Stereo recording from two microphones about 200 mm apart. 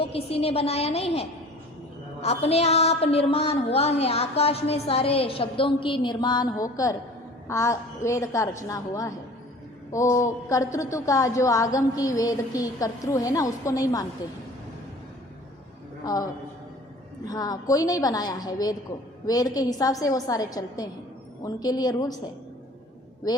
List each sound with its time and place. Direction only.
0.0 s a woman's voice: 30° left (ahead or behind)
16.1 s a woman's voice: 20° left (ahead or behind)
17.2 s a woman's voice: 20° left (ahead or behind)